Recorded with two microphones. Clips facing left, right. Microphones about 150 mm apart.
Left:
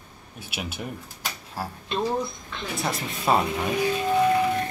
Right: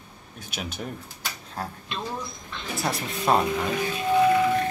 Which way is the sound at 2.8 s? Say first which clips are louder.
Right 2 dB; centre (ahead or behind).